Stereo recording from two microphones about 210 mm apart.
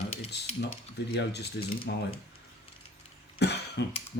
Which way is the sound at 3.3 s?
50° left (ahead or behind).